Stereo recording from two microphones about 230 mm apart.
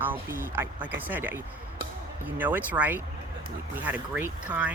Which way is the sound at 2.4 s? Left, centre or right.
Centre.